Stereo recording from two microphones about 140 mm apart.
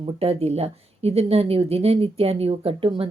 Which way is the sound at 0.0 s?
45° right (ahead or behind).